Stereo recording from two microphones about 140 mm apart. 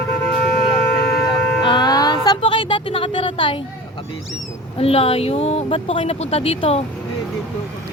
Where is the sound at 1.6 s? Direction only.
35° left (ahead or behind).